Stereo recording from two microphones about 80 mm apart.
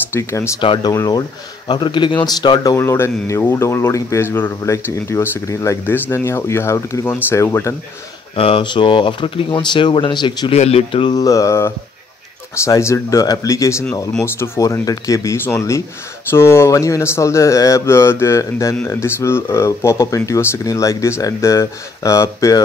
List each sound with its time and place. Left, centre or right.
0.1 s speech: left
0.6 s speech: left
1.7 s speech: left
2.8 s speech: left
5.9 s speech: left
8.5 s speech: left
11.1 s mantra: left
12.5 s speech: left